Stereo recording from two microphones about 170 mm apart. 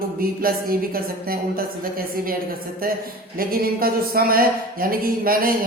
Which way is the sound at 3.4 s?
60° right (ahead or behind).